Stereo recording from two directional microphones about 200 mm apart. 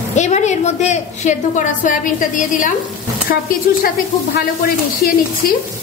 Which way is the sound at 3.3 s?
55° left (ahead or behind).